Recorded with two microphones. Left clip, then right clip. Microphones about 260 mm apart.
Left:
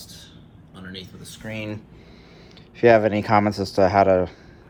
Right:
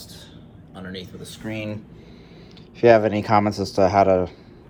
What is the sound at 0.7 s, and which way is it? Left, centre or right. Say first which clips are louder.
Speech: right 3 dB; centre.